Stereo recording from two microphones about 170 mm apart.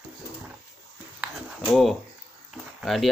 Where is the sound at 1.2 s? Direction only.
Centre (ahead or behind).